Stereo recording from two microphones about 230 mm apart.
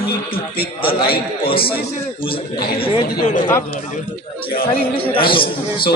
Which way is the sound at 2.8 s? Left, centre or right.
Left.